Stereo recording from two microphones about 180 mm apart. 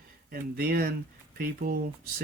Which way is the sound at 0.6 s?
60° right (ahead or behind).